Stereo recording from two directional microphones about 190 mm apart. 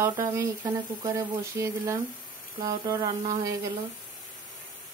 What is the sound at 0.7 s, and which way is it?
Speech, 20° right (ahead or behind).